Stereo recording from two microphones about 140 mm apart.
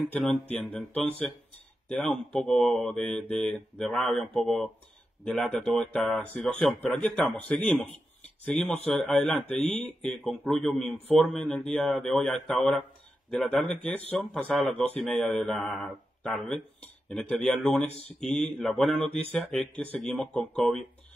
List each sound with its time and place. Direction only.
0.2 s a man's voice: 5° left (ahead or behind)